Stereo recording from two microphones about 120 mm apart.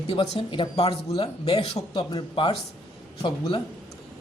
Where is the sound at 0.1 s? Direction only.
50° left (ahead or behind).